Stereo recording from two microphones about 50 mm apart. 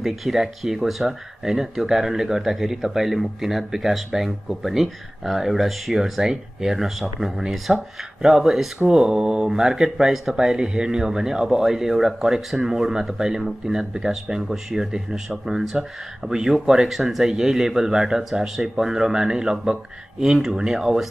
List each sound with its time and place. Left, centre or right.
0.0 s speech: centre